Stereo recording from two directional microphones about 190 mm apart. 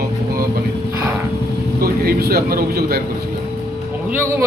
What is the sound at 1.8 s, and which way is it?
A man's voice, 55° right (ahead or behind).